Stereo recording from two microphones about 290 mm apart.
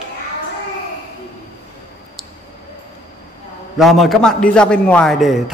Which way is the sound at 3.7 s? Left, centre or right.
Centre.